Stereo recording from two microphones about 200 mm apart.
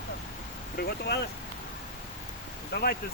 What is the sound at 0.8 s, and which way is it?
Speech, 55° left (ahead or behind).